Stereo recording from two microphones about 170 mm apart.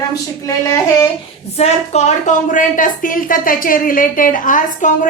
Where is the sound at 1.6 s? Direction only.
40° left (ahead or behind).